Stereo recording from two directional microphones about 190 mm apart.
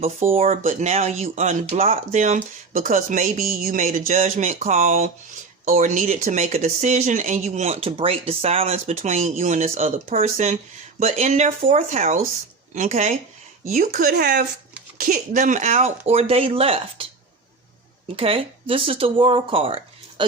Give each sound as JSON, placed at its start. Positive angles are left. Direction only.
{"t": 0.3, "sound": "speech", "side_deg": -35}
{"t": 18.2, "sound": "speech", "side_deg": -30}